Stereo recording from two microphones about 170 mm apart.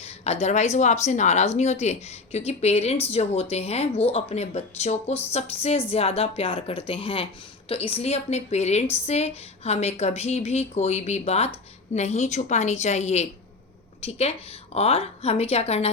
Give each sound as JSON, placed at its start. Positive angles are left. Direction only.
{"t": 0.0, "sound": "a woman's voice", "side_deg": 40}